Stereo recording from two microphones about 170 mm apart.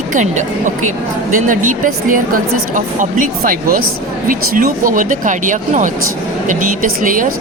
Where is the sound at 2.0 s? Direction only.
55° right (ahead or behind).